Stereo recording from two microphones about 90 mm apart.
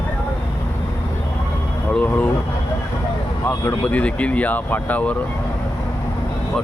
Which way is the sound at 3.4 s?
20° left (ahead or behind).